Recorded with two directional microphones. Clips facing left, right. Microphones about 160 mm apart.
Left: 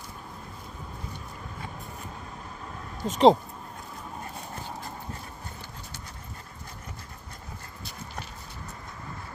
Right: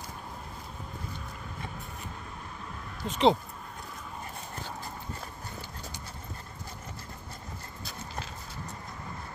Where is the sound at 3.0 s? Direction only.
40° left (ahead or behind).